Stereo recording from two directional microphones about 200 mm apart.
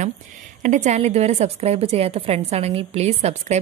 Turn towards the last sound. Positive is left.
turn(degrees=-30)  # may be behind; listen again after turning